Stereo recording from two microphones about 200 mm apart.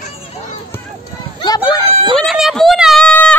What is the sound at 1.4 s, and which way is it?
Run, 20° left (ahead or behind).